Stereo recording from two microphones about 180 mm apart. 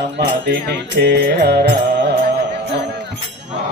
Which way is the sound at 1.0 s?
65° right (ahead or behind).